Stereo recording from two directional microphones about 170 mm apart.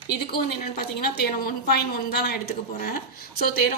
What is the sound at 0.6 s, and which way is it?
A woman's voice, 60° left (ahead or behind).